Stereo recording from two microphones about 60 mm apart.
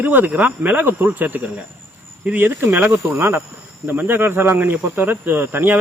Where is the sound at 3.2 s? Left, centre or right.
Right.